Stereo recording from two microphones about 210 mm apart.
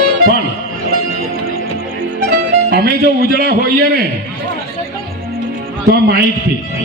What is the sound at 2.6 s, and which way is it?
A man's voice, 45° right (ahead or behind).